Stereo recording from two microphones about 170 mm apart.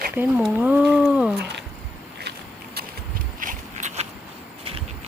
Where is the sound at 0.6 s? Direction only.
10° right (ahead or behind).